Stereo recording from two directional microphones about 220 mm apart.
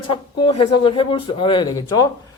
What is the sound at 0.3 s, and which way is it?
A man's voice, 20° left (ahead or behind).